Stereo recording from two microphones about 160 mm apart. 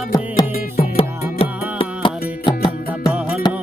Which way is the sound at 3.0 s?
5° right (ahead or behind).